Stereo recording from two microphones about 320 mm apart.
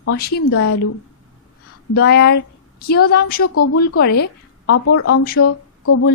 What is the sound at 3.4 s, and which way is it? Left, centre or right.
Speech, left.